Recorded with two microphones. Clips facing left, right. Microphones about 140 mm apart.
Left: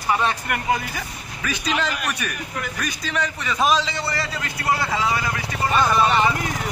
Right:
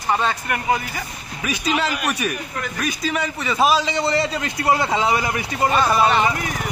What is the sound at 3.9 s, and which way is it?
A man's voice, 25° right (ahead or behind).